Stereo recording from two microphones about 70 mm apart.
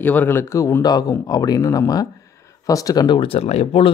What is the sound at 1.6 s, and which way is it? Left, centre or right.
Speech, left.